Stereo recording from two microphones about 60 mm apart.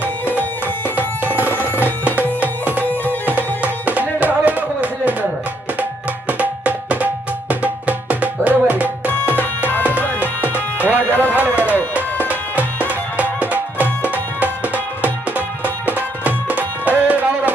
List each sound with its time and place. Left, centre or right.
1.5 s music: left
1.8 s music: right
6.2 s music: right
9.4 s music: left
11.3 s music: right
12.9 s music: right